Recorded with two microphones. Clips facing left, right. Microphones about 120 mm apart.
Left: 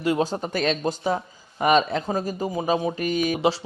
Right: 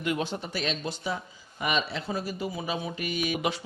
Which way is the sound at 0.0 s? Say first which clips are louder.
Left 7 dB; 35° left (ahead or behind).